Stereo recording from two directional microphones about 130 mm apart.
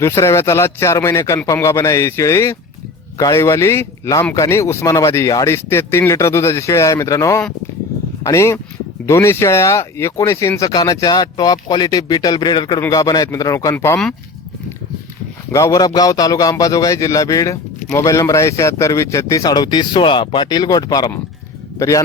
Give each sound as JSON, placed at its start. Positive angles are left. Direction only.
{"t": 0.0, "sound": "speech", "side_deg": 20}
{"t": 15.5, "sound": "a man's voice", "side_deg": 25}